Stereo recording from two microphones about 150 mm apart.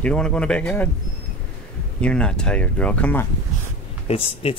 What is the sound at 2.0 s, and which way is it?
Speech, 5° left (ahead or behind).